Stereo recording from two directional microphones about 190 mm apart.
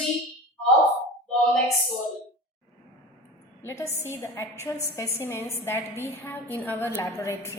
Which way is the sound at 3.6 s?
15° left (ahead or behind).